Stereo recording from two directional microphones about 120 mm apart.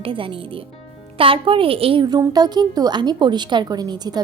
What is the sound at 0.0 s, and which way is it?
A woman's voice, 45° right (ahead or behind).